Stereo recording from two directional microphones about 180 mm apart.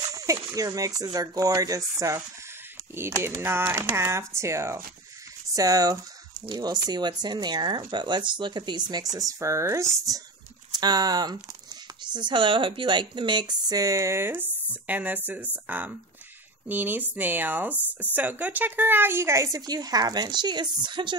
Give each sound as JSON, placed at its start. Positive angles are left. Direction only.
{"t": 0.1, "sound": "a woman's voice", "side_deg": -20}